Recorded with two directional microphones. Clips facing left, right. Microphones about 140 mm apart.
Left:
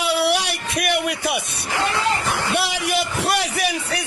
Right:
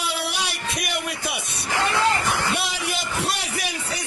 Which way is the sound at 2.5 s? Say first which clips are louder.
Left 6 dB; 70° left (ahead or behind).